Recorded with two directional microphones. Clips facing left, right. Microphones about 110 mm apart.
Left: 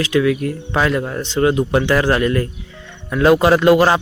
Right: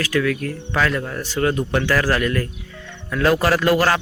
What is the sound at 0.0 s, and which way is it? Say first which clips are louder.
A man's voice: left 5 dB; 20° left (ahead or behind).